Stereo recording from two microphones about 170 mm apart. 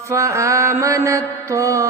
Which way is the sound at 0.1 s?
20° right (ahead or behind).